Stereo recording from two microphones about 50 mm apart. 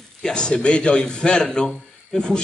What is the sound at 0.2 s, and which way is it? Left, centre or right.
A man's voice, centre.